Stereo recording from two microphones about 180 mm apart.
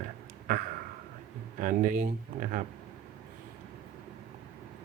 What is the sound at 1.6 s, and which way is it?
Speech, 50° right (ahead or behind).